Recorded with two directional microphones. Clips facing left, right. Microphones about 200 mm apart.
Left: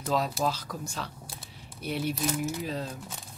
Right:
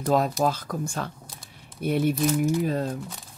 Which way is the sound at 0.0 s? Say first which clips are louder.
Right 6 dB; 50° right (ahead or behind).